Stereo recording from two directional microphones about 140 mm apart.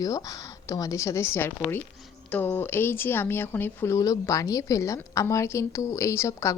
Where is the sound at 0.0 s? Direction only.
25° left (ahead or behind).